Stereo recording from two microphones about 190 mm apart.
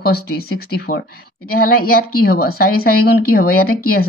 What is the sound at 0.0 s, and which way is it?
A woman's voice, 55° left (ahead or behind).